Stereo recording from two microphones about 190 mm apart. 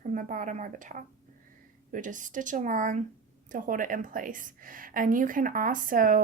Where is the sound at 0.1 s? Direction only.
45° right (ahead or behind).